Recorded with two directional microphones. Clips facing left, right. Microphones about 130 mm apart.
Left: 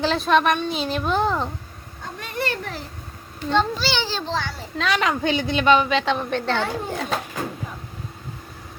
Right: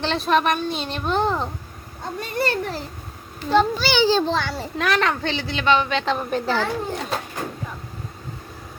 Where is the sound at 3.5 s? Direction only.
Centre (ahead or behind).